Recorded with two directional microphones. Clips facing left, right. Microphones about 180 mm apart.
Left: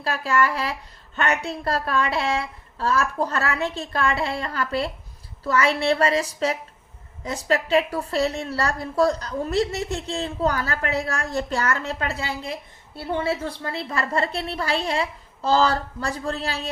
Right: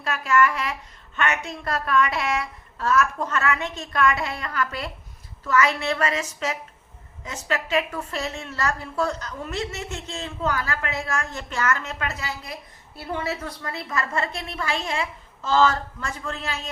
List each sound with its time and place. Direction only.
0.0 s a woman's voice: 30° left (ahead or behind)